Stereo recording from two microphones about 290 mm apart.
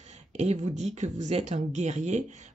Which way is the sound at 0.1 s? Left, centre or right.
Right.